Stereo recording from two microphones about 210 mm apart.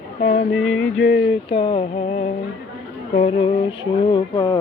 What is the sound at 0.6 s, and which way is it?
Music, 75° left (ahead or behind).